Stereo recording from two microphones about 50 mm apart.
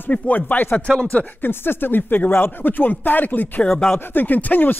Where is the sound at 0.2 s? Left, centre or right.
Left.